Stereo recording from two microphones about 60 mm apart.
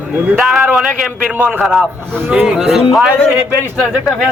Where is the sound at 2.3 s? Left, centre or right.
Centre.